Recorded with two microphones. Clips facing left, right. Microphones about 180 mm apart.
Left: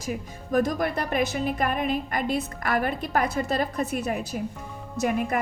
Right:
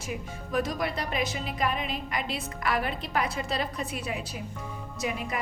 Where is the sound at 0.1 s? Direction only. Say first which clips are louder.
Left 5 dB; 45° left (ahead or behind).